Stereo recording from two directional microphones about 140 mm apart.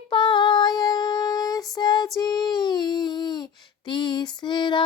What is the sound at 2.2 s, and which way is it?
Child singing, 30° left (ahead or behind).